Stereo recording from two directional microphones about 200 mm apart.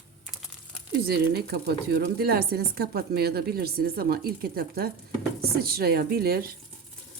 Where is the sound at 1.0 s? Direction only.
55° right (ahead or behind).